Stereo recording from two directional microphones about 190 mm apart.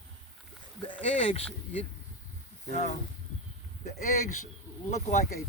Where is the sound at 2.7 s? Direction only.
40° left (ahead or behind).